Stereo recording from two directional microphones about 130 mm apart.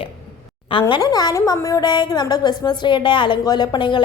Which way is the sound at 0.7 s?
40° left (ahead or behind).